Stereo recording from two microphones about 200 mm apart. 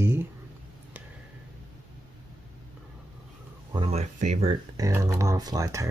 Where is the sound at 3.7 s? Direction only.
25° right (ahead or behind).